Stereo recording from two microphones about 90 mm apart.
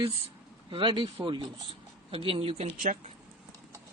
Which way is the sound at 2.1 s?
90° right.